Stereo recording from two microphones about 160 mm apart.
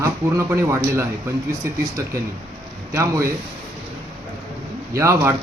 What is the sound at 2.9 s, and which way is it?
Speech, 20° right (ahead or behind).